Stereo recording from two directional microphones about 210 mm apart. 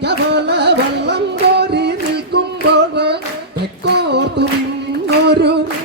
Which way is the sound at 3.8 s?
55° right (ahead or behind).